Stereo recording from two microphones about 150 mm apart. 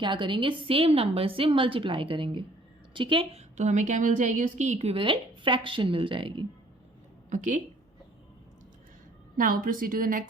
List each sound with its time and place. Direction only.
0.0 s a woman's voice: 30° right (ahead or behind)
3.6 s a woman's voice: 55° right (ahead or behind); by 6.4 s 35° right (ahead or behind)
7.3 s speech: 60° right (ahead or behind)
9.4 s a woman's voice: 70° right (ahead or behind)